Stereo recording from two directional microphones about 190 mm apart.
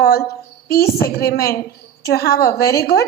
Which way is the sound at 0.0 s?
55° left (ahead or behind).